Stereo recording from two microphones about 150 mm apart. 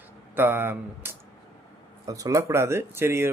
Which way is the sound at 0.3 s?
15° right (ahead or behind).